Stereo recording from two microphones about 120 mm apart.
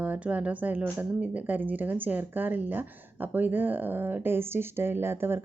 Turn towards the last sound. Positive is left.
turn(degrees=-20)  # may be behind; listen again after turning